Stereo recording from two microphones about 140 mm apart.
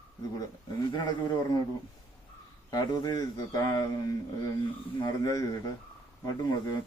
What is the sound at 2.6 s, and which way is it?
Speech, 30° left (ahead or behind).